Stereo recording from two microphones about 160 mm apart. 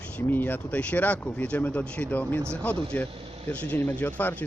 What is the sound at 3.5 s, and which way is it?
Speech, 10° left (ahead or behind).